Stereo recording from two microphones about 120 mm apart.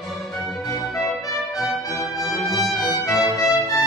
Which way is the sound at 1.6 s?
Centre (ahead or behind).